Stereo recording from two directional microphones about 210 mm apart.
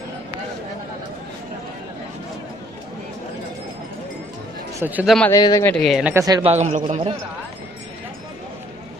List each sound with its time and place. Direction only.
4.7 s speech: 10° right (ahead or behind)
5.3 s speech: 15° left (ahead or behind)
5.8 s speech: centre (ahead or behind)
6.1 s speech: 15° right (ahead or behind)
6.5 s a man's voice: 35° right (ahead or behind)